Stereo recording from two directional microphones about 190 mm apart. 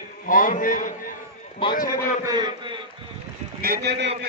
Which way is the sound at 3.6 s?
60° right (ahead or behind).